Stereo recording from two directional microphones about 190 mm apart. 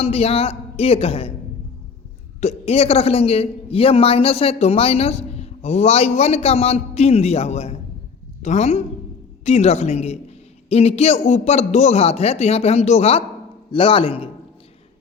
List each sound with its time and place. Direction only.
0.0 s a man's voice: 30° left (ahead or behind)
2.4 s a man's voice: 35° left (ahead or behind)